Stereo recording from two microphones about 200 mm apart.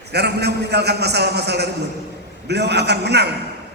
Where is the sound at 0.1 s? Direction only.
55° right (ahead or behind).